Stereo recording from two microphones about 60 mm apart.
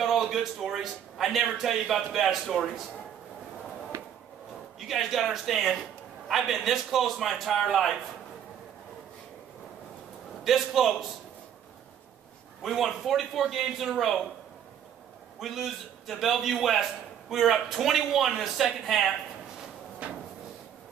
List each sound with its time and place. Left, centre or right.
0.0 s a man's voice: centre
3.9 s a sound: right
4.7 s a man's voice: centre
10.4 s a man's voice: centre
12.6 s a man's voice: centre
15.3 s a man's voice: centre
20.0 s drawer open or close: right